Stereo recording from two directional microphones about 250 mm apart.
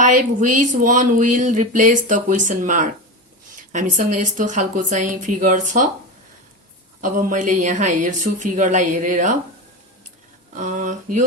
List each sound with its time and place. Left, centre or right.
0.0 s speech: right
7.0 s speech: right
10.5 s speech: right